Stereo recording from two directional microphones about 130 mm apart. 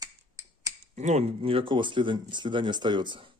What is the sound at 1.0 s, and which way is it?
Speech, 60° right (ahead or behind).